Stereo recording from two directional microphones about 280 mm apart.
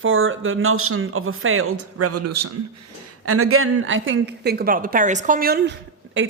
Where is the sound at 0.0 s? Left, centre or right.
Right.